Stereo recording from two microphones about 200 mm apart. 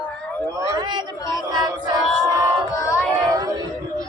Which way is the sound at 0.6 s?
20° right (ahead or behind).